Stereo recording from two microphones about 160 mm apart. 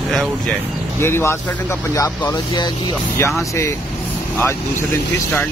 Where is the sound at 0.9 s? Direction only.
15° left (ahead or behind).